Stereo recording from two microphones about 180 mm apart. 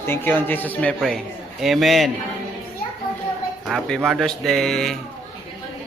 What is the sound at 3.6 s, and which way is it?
Speech, centre (ahead or behind).